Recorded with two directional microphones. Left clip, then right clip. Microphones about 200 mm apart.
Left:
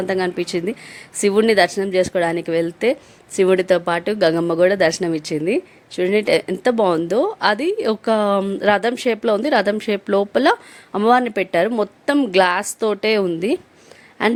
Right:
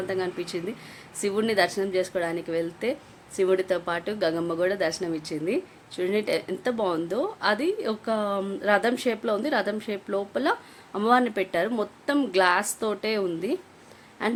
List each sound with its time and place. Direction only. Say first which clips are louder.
0.1 s a woman's voice: left 10 dB; 40° left (ahead or behind)